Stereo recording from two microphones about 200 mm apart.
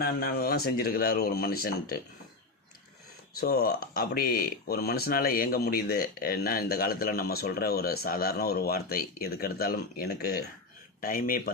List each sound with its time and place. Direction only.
0.0 s speech: 50° left (ahead or behind)
3.4 s speech: 55° left (ahead or behind)